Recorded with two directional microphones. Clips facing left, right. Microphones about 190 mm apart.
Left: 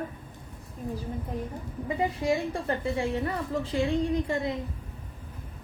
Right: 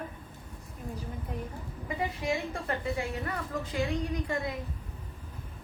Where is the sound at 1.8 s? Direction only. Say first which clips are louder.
Left 5 dB; 30° left (ahead or behind).